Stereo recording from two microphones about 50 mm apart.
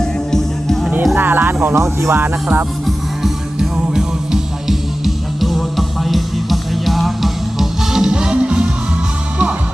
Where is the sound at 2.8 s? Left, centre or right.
Centre.